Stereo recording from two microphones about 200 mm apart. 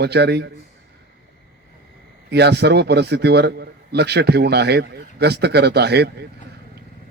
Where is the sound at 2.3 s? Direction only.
55° right (ahead or behind).